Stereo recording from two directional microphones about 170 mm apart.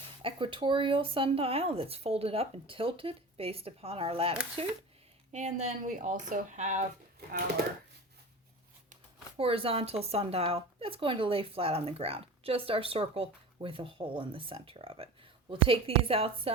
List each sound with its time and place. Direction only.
0.2 s speech: 30° right (ahead or behind); by 6.8 s 45° right (ahead or behind)
9.4 s speech: 35° right (ahead or behind)